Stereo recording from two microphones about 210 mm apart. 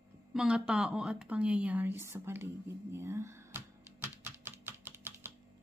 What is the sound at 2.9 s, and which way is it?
Typing, 15° right (ahead or behind).